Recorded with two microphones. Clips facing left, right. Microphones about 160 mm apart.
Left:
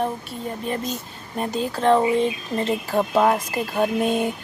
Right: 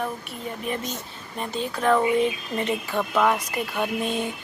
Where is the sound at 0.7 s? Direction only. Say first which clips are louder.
Left 2 dB; 45° left (ahead or behind).